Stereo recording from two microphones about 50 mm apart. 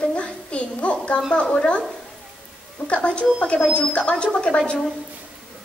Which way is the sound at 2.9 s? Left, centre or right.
Left.